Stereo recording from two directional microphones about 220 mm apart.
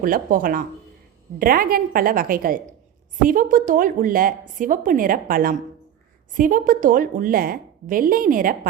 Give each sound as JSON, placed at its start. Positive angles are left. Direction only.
{"t": 0.0, "sound": "speech", "side_deg": -40}